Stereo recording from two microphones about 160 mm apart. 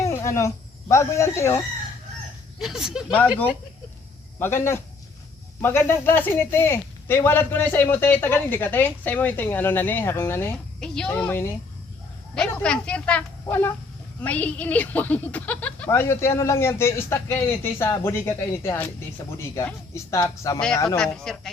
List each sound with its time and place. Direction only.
0.0 s speech: 20° left (ahead or behind)
2.6 s speech: centre (ahead or behind)
4.4 s a man's voice: 15° left (ahead or behind)
13.4 s a sound: 15° left (ahead or behind)
14.2 s a man's voice: 10° left (ahead or behind)
21.0 s speech: 5° left (ahead or behind)